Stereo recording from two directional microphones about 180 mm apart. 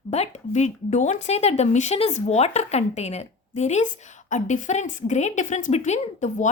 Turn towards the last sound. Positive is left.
turn(degrees=40)  # may be behind; listen again after turning